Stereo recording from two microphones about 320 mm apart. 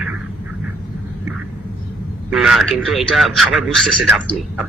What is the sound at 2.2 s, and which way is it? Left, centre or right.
A man's voice, centre.